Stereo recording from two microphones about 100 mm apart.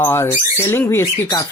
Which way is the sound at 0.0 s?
25° left (ahead or behind).